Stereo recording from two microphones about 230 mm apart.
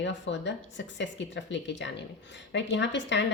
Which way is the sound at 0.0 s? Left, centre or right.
Left.